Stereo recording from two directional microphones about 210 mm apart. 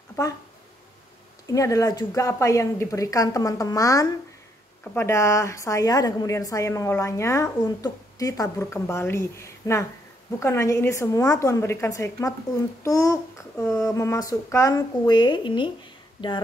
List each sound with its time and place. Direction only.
1.5 s a woman's voice: 15° left (ahead or behind)